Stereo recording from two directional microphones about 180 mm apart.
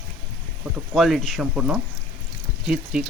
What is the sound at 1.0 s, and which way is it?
Speech, centre (ahead or behind).